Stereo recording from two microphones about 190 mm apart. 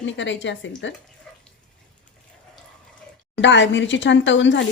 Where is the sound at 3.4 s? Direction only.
75° left (ahead or behind).